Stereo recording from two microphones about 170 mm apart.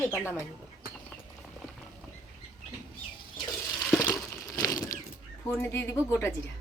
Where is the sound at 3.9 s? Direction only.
15° left (ahead or behind).